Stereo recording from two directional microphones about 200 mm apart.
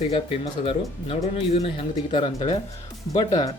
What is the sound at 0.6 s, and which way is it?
Speech, 30° left (ahead or behind).